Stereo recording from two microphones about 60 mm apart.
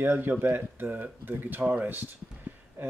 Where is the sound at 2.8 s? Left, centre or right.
Right.